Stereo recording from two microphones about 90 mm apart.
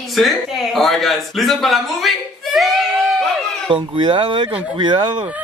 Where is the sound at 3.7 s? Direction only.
65° right (ahead or behind).